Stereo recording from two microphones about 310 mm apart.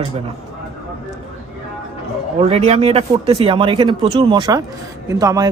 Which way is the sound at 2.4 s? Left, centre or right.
Centre.